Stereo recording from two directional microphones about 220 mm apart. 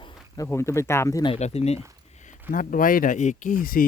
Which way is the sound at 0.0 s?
15° left (ahead or behind).